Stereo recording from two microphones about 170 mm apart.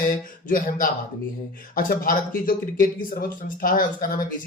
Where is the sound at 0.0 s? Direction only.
55° left (ahead or behind).